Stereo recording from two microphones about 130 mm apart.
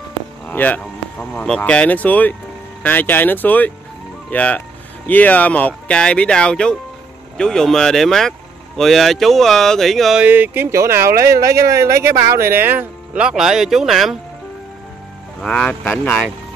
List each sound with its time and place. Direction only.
0.5 s speech: 10° left (ahead or behind)
10.2 s speech: 15° right (ahead or behind)
15.4 s speech: 10° left (ahead or behind)